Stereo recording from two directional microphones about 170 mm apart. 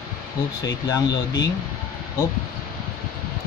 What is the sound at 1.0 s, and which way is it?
Speech, 90° left.